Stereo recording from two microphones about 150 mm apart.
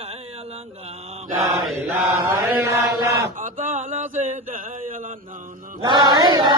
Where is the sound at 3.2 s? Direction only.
65° right (ahead or behind).